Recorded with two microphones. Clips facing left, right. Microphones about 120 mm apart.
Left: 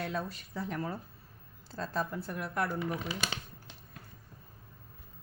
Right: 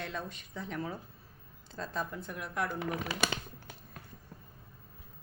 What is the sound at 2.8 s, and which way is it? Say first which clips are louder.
Speech: right 1 dB; 70° right (ahead or behind).